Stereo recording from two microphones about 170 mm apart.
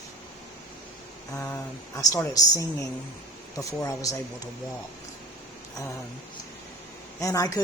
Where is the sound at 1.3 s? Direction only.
20° left (ahead or behind).